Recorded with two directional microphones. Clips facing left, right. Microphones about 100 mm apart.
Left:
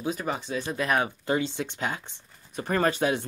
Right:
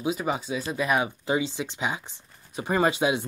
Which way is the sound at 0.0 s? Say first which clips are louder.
Right 3 dB; 10° right (ahead or behind).